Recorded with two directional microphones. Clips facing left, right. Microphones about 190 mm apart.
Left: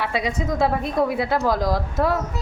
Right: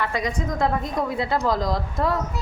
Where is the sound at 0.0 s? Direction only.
10° left (ahead or behind).